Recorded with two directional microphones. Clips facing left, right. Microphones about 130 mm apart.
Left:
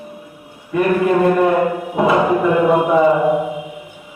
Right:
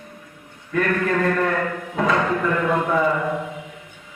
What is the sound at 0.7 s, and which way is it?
Music, 15° left (ahead or behind).